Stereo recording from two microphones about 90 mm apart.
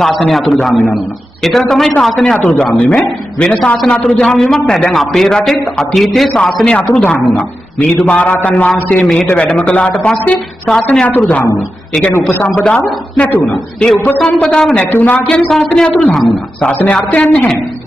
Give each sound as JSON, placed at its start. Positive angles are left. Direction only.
{"t": 0.0, "sound": "a man's voice", "side_deg": 5}
{"t": 12.4, "sound": "a man's voice", "side_deg": 10}